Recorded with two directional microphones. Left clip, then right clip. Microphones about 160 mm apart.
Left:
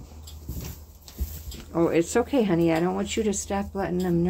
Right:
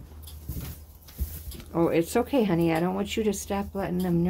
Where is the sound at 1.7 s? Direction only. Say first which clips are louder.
Left 2 dB; 25° right (ahead or behind).